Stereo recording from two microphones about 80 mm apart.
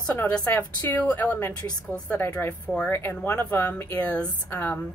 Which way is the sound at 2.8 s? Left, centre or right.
Left.